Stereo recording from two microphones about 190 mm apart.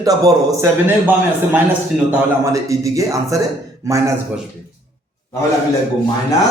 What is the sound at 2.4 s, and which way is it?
A man's voice, 15° right (ahead or behind).